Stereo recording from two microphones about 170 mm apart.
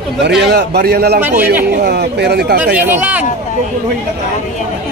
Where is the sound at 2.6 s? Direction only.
10° right (ahead or behind).